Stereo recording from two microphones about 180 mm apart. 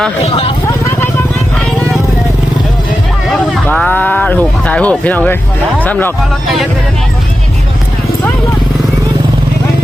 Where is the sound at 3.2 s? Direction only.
5° left (ahead or behind).